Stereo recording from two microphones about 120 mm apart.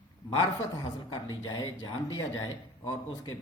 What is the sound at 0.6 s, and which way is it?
A man's voice, 30° left (ahead or behind).